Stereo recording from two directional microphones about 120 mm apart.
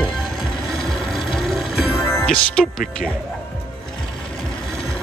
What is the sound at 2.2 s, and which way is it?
Speech, 5° left (ahead or behind).